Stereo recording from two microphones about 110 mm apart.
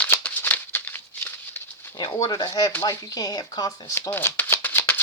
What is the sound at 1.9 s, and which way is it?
Speech, 35° left (ahead or behind).